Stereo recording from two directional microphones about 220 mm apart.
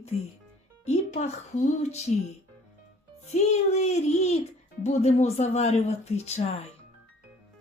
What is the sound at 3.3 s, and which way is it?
Speech, 30° left (ahead or behind).